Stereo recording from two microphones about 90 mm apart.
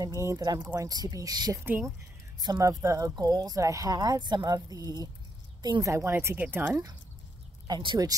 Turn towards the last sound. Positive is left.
turn(degrees=-55)  # may be behind; listen again after turning